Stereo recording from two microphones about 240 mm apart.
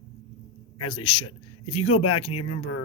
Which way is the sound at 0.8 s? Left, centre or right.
Left.